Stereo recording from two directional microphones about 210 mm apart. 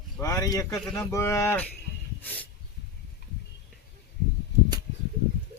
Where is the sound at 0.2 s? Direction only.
15° left (ahead or behind).